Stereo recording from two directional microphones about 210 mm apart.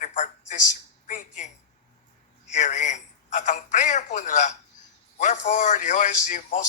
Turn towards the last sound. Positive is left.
turn(degrees=35)  # may be behind; listen again after turning